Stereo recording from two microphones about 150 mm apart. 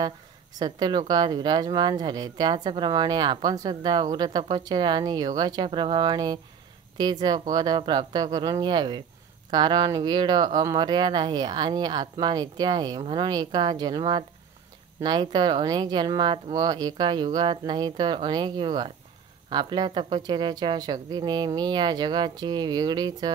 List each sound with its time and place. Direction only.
0.6 s speech: 30° right (ahead or behind)